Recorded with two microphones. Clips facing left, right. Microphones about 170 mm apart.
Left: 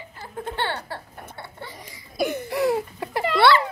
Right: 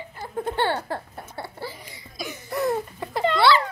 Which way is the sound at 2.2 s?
60° left (ahead or behind).